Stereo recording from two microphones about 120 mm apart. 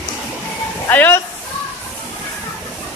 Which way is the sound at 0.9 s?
15° left (ahead or behind).